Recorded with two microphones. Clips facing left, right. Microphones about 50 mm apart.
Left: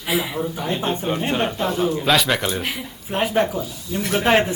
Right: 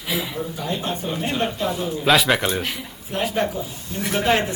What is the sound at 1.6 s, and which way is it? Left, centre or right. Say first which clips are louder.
Speech: even; centre.